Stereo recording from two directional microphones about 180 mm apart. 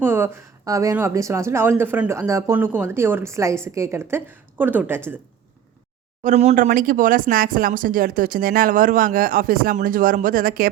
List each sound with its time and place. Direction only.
0.0 s speech: 15° right (ahead or behind)
6.2 s speech: 40° right (ahead or behind)